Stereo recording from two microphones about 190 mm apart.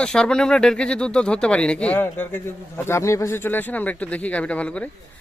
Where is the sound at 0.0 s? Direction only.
5° left (ahead or behind).